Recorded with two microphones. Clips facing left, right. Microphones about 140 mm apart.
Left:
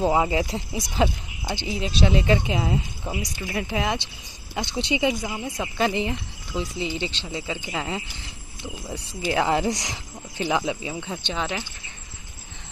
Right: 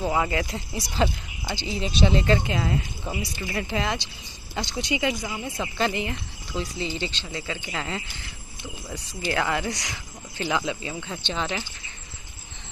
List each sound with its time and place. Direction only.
0.0 s speech: 20° left (ahead or behind)
1.7 s speech: centre (ahead or behind)
4.6 s speech: 25° left (ahead or behind)
5.4 s speech: 10° left (ahead or behind)